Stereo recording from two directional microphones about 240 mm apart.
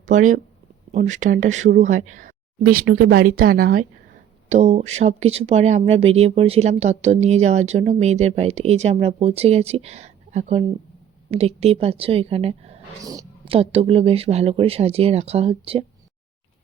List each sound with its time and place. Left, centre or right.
0.0 s speech: right